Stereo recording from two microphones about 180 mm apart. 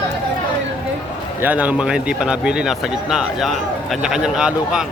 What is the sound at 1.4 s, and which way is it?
A man's voice, 10° right (ahead or behind).